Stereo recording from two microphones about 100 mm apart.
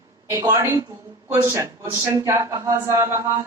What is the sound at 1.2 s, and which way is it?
Speech, 20° right (ahead or behind).